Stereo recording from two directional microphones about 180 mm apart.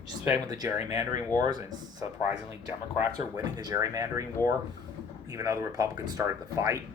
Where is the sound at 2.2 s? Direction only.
35° left (ahead or behind).